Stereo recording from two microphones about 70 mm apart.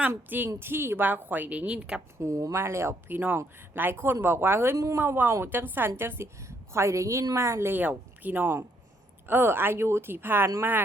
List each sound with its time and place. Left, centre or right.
0.1 s a woman's voice: right
2.1 s speech: right
3.1 s speech: right
6.7 s a woman's voice: right